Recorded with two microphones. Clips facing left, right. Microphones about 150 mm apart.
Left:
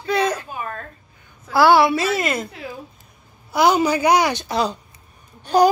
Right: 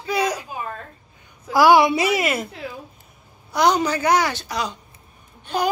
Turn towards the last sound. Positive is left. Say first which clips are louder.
# left 7 dB
turn(degrees=35)  # may be behind; listen again after turning